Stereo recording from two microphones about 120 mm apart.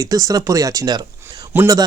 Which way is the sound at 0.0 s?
30° right (ahead or behind).